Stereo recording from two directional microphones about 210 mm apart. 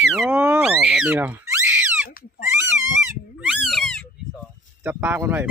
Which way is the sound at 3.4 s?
Centre (ahead or behind).